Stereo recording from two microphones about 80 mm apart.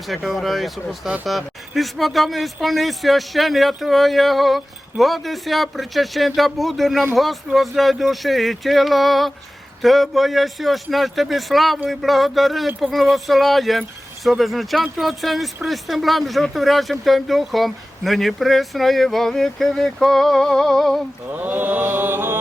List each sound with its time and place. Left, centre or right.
0.1 s speech: centre
21.3 s mantra: right